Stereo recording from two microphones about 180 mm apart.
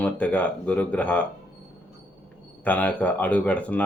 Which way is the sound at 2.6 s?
10° left (ahead or behind).